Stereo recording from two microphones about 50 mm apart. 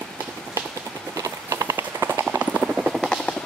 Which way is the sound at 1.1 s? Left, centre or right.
Right.